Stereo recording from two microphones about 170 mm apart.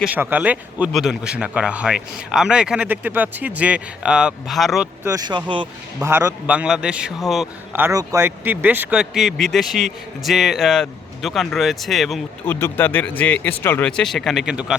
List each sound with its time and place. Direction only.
0.0 s speech: 10° right (ahead or behind)
5.0 s speech: 20° right (ahead or behind); by 7.4 s centre (ahead or behind)
7.7 s speech: 15° right (ahead or behind)
12.5 s speech: 15° left (ahead or behind); by 14.8 s 5° right (ahead or behind)